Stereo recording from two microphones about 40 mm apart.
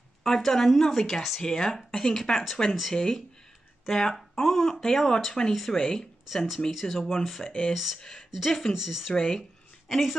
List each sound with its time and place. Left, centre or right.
0.2 s speech: centre
2.9 s speech: centre
5.8 s speech: centre
6.3 s speech: centre
8.0 s speech: centre
8.4 s speech: centre
9.1 s speech: centre
9.8 s a woman's voice: centre